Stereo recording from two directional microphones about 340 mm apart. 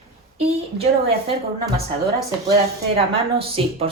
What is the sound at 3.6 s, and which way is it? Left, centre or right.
Speech, centre.